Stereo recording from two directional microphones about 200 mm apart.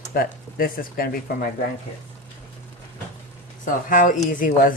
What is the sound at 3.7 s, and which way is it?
Speech, 40° left (ahead or behind).